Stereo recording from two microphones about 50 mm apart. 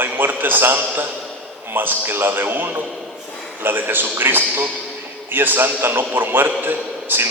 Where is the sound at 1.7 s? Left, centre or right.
Right.